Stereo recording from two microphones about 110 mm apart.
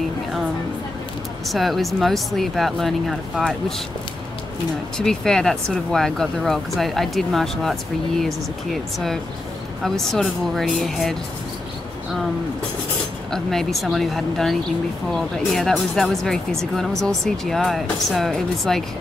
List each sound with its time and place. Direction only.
1.5 s speech: centre (ahead or behind)
4.9 s speech: 5° left (ahead or behind)
9.8 s speech: 5° left (ahead or behind)
13.3 s speech: 5° left (ahead or behind)